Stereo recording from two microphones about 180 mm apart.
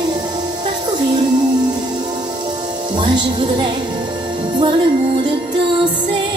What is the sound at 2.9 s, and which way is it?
Speech, 25° right (ahead or behind).